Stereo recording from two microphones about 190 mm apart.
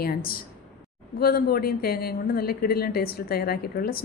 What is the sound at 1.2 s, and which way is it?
Speech, 55° left (ahead or behind).